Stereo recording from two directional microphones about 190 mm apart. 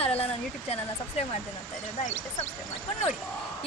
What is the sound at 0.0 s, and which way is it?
Speech, 30° left (ahead or behind).